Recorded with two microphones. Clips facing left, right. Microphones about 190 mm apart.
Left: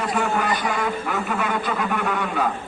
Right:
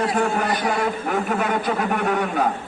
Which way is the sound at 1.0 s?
45° right (ahead or behind).